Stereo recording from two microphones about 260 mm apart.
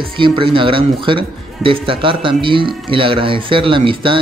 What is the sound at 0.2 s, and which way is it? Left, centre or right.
Speech, centre.